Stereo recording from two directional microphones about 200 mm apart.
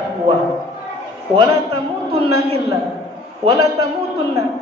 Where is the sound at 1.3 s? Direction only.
25° right (ahead or behind).